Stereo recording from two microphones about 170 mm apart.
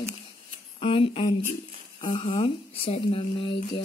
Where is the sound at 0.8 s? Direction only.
30° left (ahead or behind).